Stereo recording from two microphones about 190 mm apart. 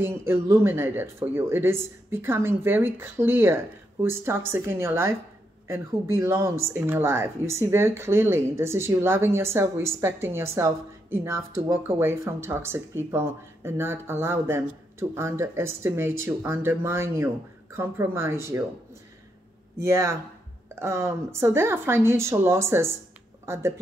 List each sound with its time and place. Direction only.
0.0 s speech: 10° right (ahead or behind)
19.8 s speech: 15° right (ahead or behind)